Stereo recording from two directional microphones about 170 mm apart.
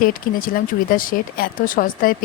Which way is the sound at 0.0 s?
55° left (ahead or behind).